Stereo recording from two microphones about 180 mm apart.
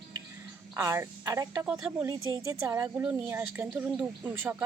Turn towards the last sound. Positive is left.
turn(degrees=-10)  # may be behind; listen again after turning